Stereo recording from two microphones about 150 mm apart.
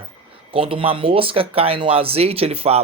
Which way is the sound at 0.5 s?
40° right (ahead or behind).